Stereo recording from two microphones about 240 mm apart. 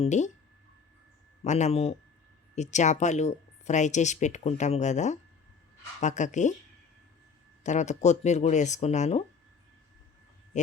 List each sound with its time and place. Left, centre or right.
0.0 s speech: left
1.5 s speech: left
7.6 s speech: left
10.5 s a sound: left